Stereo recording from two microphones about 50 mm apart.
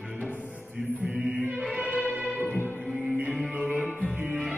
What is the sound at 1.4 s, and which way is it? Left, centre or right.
Choir, right.